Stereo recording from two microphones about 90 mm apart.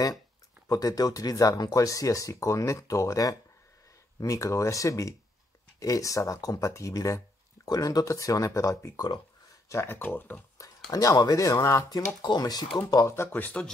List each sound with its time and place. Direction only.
0.7 s speech: 45° left (ahead or behind)
9.7 s speech: 30° left (ahead or behind)
10.9 s speech: 40° left (ahead or behind)
12.2 s speech: 50° left (ahead or behind)
13.0 s speech: 30° left (ahead or behind)